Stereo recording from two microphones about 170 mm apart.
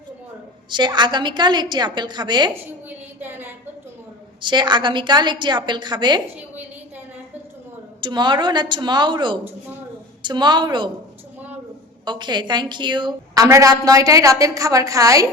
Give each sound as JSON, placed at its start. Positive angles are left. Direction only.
{"t": 0.7, "sound": "a woman's voice", "side_deg": -25}
{"t": 3.2, "sound": "a sound", "side_deg": -10}
{"t": 4.4, "sound": "a woman's voice", "side_deg": -25}
{"t": 8.0, "sound": "a woman's voice", "side_deg": -25}
{"t": 12.0, "sound": "a woman's voice", "side_deg": -25}